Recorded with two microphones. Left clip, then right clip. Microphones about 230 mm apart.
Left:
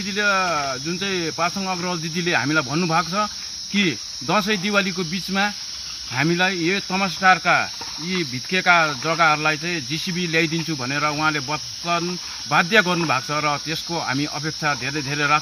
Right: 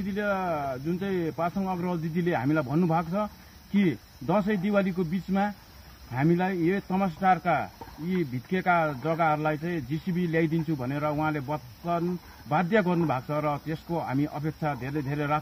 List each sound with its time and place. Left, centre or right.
0.1 s cricket: centre